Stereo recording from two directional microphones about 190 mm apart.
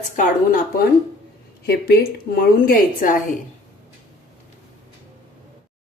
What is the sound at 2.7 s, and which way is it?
Speech, 45° left (ahead or behind).